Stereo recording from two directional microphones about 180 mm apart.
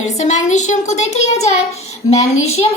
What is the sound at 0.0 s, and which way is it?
Speech, 40° left (ahead or behind).